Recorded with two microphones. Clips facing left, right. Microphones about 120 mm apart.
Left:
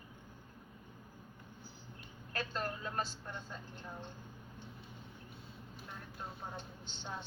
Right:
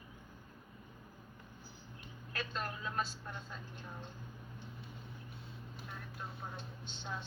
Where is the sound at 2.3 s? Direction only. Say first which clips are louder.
Left 2 dB; 35° left (ahead or behind).